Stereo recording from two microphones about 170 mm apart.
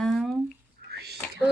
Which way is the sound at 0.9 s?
70° right (ahead or behind).